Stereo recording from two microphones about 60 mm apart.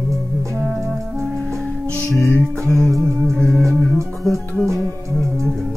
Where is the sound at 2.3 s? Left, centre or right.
Centre.